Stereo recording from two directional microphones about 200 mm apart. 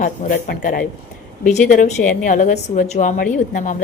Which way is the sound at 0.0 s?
45° left (ahead or behind).